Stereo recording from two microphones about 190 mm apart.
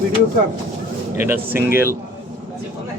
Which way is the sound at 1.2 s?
10° right (ahead or behind).